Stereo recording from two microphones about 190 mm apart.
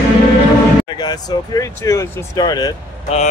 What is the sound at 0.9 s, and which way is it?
Speech, 20° left (ahead or behind).